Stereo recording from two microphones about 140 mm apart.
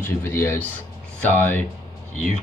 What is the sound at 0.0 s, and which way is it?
Speech, 15° left (ahead or behind).